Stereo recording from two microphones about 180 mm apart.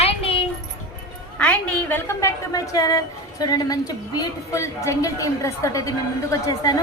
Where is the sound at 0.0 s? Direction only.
30° left (ahead or behind).